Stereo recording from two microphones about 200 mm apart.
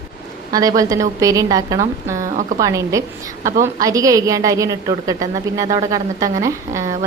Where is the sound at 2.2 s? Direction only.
40° right (ahead or behind).